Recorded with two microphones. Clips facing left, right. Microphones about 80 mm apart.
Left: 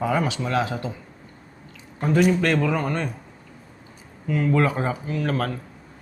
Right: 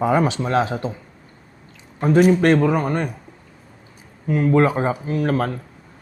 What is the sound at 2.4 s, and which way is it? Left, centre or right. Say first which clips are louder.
Speech: right 6 dB; right.